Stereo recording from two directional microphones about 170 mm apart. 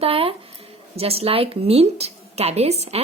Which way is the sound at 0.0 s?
35° right (ahead or behind).